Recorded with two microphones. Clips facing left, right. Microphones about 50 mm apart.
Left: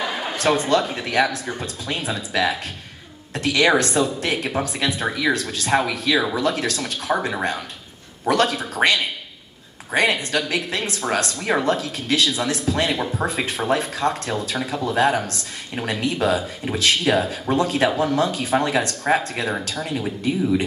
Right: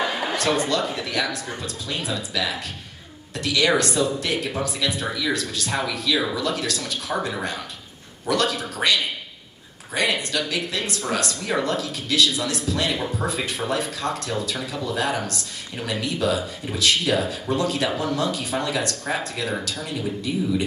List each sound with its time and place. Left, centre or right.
0.7 s speech: left
9.9 s speech: left